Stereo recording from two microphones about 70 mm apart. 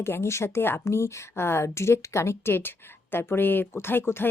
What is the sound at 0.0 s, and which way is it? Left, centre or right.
A woman's voice, left.